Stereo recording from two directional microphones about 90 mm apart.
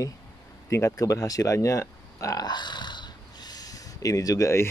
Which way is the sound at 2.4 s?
55° left (ahead or behind).